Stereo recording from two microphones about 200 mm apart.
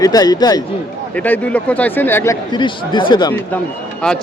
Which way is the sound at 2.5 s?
25° left (ahead or behind).